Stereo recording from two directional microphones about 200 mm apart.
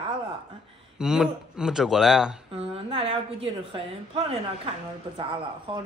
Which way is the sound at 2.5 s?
30° right (ahead or behind).